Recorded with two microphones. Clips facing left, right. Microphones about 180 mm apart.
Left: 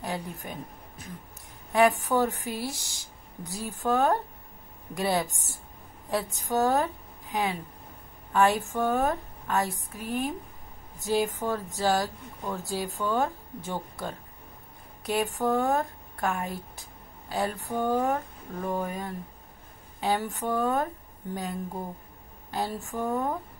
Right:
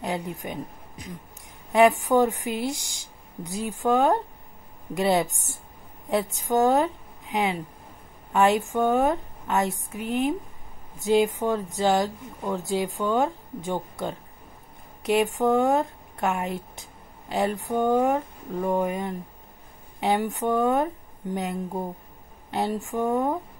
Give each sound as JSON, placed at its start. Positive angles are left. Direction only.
{"t": 0.0, "sound": "a woman's voice", "side_deg": -20}
{"t": 6.3, "sound": "a woman's voice", "side_deg": -20}
{"t": 15.3, "sound": "speech", "side_deg": -20}